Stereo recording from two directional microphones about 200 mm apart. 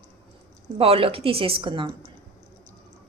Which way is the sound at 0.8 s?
30° right (ahead or behind).